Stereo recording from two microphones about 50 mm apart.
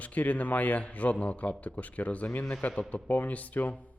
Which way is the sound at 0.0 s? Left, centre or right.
Left.